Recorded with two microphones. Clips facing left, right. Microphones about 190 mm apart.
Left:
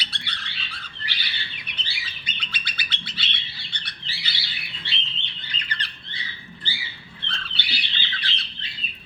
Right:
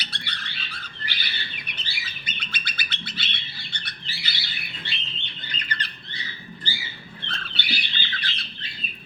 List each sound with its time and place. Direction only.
0.0 s bird: 45° right (ahead or behind)